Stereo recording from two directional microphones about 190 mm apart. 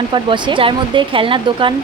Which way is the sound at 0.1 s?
25° right (ahead or behind).